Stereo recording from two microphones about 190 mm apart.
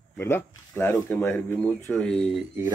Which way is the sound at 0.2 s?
10° left (ahead or behind).